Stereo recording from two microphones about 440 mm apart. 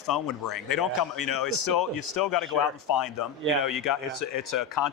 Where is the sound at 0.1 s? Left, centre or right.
Left.